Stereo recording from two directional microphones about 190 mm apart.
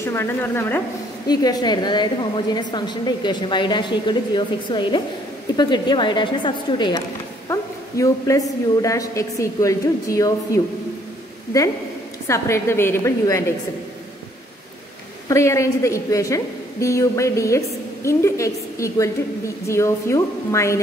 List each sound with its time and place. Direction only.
0.0 s a woman's voice: 15° left (ahead or behind)
12.3 s a woman's voice: 15° left (ahead or behind)
15.2 s a woman's voice: 15° left (ahead or behind)